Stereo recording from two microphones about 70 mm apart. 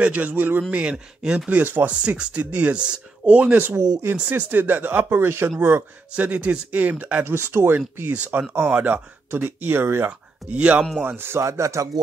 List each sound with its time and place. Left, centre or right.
0.0 s speech: right
1.5 s speech: right
1.9 s speech: centre; by 5.9 s right
6.1 s speech: right
7.2 s speech: right
10.0 s speech: centre
11.1 s speech: right
11.4 s speech: right